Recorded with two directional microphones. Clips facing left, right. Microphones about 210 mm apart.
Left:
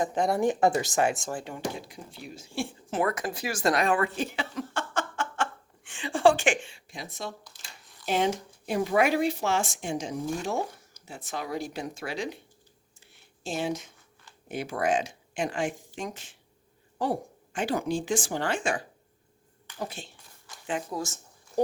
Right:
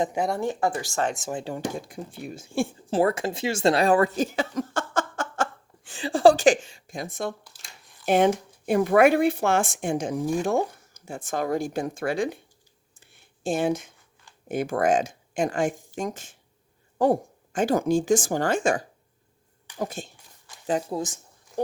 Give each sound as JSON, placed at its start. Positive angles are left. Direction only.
{"t": 0.3, "sound": "speech", "side_deg": 15}
{"t": 1.3, "sound": "speech", "side_deg": -25}
{"t": 1.5, "sound": "speech", "side_deg": -50}
{"t": 2.9, "sound": "speech", "side_deg": -30}
{"t": 13.4, "sound": "speech", "side_deg": -50}